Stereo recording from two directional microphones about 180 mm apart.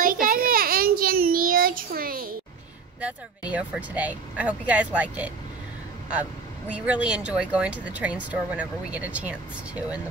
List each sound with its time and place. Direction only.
0.0 s child singing: 50° right (ahead or behind)
3.0 s speech: 5° right (ahead or behind)
6.7 s speech: 5° right (ahead or behind)